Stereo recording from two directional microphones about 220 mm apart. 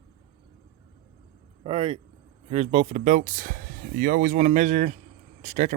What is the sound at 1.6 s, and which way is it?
Speech, 25° right (ahead or behind).